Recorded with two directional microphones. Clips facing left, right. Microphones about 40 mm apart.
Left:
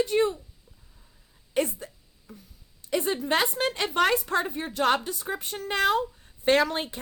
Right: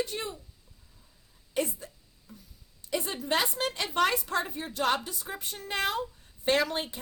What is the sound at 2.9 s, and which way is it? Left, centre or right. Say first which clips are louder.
A woman's voice: left 4 dB; left.